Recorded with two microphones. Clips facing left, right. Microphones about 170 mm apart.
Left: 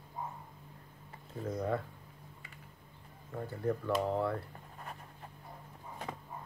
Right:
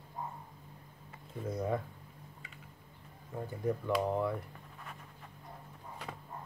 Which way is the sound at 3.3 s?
15° right (ahead or behind).